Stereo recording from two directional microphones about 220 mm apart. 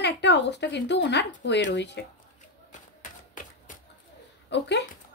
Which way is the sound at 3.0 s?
35° left (ahead or behind).